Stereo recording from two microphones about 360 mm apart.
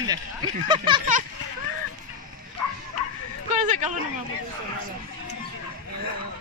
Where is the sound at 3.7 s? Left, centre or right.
Centre.